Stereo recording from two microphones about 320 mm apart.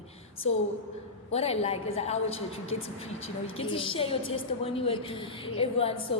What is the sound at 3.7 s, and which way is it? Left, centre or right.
A woman's voice, centre.